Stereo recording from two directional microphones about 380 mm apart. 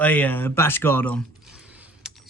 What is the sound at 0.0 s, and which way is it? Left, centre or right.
Speech, centre.